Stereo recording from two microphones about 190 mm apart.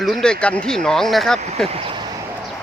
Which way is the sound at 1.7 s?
25° right (ahead or behind).